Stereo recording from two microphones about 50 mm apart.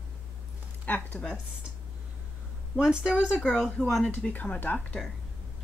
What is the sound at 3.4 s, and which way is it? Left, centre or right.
Speech, centre.